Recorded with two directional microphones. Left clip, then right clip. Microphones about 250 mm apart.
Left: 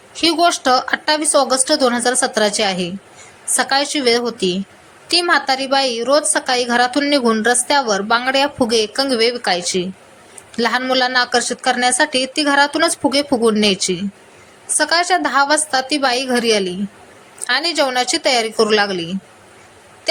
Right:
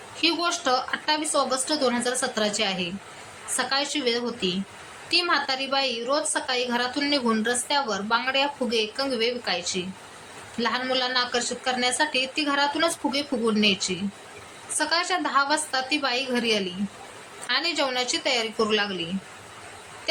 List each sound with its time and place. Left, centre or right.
0.2 s a woman's voice: left